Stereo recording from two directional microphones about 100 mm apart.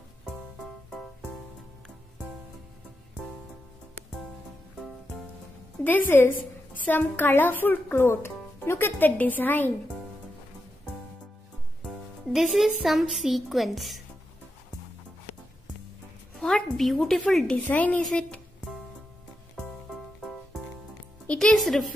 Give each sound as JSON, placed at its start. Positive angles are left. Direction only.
{"t": 5.9, "sound": "a woman's voice", "side_deg": 20}
{"t": 12.3, "sound": "a woman's voice", "side_deg": 0}
{"t": 16.3, "sound": "speech", "side_deg": 5}
{"t": 17.6, "sound": "a woman's voice", "side_deg": 15}
{"t": 18.0, "sound": "a sound", "side_deg": 5}
{"t": 19.5, "sound": "music", "side_deg": 0}
{"t": 21.3, "sound": "music", "side_deg": 10}
{"t": 21.5, "sound": "a woman's voice", "side_deg": 0}